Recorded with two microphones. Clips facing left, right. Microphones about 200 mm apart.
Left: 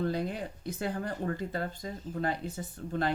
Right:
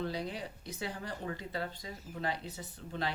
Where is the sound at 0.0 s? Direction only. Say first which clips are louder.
Left 5 dB; 50° left (ahead or behind).